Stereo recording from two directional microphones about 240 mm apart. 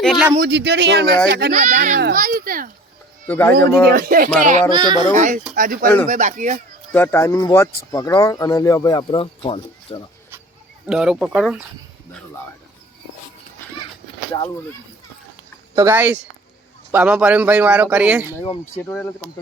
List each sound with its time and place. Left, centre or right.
0.0 s speech: centre
0.3 s a child's voice: right
3.2 s speech: centre
3.9 s a child's voice: right
4.7 s a child's voice: centre
5.1 s a child's voice: right
6.9 s speech: centre
10.8 s speech: centre
15.7 s speech: centre
18.4 s speech: left
18.8 s speech: centre